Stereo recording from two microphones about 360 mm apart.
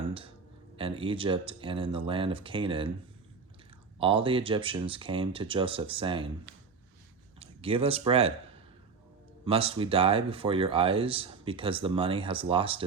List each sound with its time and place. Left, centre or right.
0.8 s speech: centre
3.9 s speech: centre
7.3 s speech: centre
9.4 s speech: centre